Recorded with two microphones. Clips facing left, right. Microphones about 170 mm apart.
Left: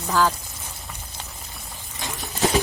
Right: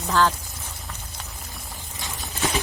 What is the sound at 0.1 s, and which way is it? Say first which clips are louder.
Speech: even; 5° left (ahead or behind).